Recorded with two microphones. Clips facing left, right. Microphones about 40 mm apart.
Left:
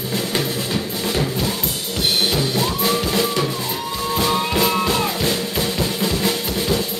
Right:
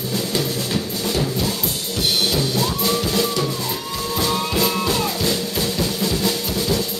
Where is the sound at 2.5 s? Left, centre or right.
Left.